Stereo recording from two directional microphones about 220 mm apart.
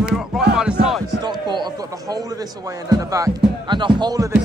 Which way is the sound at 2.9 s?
15° right (ahead or behind).